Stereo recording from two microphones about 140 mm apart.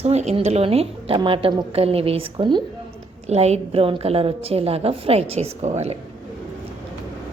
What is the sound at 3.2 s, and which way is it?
A woman's voice, 50° right (ahead or behind).